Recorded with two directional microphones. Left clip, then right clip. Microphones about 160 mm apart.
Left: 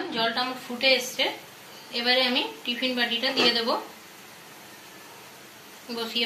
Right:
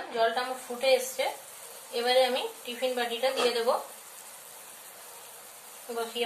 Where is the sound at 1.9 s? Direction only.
70° right (ahead or behind).